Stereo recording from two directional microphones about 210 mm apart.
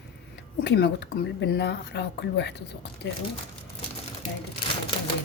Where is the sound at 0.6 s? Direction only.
55° left (ahead or behind).